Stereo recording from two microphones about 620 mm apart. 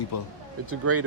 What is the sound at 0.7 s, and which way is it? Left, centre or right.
Speech, right.